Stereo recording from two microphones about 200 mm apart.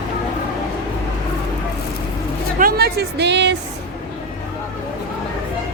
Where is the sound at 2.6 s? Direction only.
50° right (ahead or behind).